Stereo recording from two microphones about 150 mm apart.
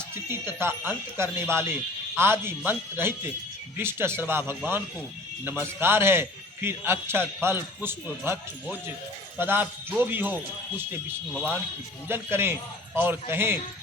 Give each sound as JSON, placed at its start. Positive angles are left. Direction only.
{"t": 0.3, "sound": "speech", "side_deg": -15}
{"t": 5.8, "sound": "speech", "side_deg": -15}